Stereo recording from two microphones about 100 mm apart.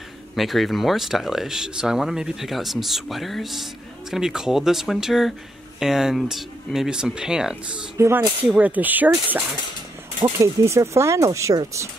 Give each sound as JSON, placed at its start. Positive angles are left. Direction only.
{"t": 0.4, "sound": "speech", "side_deg": 0}
{"t": 8.0, "sound": "speech", "side_deg": -25}
{"t": 10.4, "sound": "speech", "side_deg": -30}